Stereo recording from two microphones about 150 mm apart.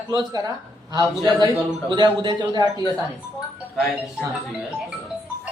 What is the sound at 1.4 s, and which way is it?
Speech, 30° right (ahead or behind).